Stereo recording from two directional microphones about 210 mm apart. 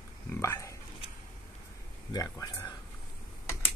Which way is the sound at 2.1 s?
15° left (ahead or behind).